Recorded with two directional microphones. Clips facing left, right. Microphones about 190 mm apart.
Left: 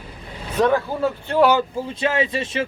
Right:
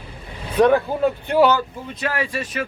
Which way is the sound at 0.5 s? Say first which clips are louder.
Right 3 dB; 15° right (ahead or behind).